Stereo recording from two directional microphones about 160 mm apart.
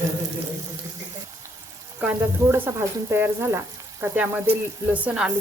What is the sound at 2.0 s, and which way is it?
Speech, 15° right (ahead or behind).